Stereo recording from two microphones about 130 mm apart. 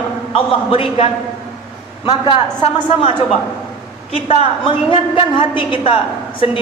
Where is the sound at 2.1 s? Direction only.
35° left (ahead or behind).